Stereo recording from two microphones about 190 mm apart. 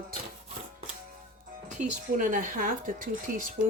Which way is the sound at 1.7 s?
45° right (ahead or behind).